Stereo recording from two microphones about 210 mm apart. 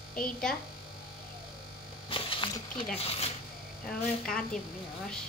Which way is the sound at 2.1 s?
25° left (ahead or behind).